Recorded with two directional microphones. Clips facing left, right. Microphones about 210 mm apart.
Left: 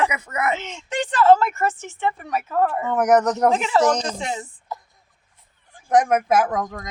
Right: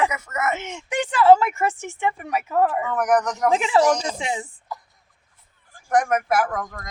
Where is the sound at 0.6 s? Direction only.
15° right (ahead or behind).